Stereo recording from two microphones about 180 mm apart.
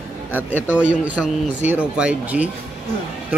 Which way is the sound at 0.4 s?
10° left (ahead or behind).